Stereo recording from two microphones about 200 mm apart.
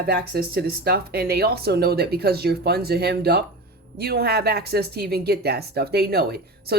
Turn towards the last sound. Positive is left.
turn(degrees=-55)  # may be behind; listen again after turning